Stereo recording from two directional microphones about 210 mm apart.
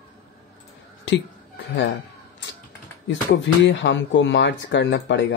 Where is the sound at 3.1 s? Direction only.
60° left (ahead or behind).